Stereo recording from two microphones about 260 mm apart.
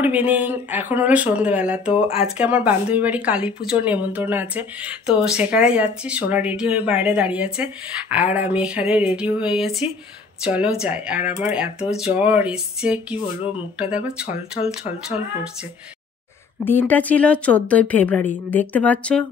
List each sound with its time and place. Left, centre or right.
0.0 s speech: centre
14.2 s speech: left
14.7 s speech: centre
16.6 s speech: centre